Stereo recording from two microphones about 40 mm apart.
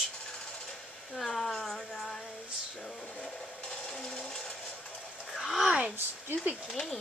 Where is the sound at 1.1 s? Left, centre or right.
Centre.